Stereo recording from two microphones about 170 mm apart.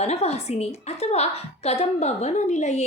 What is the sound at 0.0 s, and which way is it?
A woman's voice, 40° left (ahead or behind).